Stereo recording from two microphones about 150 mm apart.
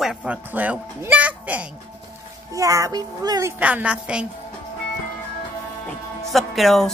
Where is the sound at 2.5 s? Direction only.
20° right (ahead or behind).